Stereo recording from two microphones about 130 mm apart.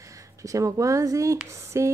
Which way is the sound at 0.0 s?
25° right (ahead or behind).